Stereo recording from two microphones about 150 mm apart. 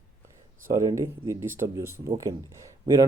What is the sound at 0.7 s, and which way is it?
Speech, 20° right (ahead or behind).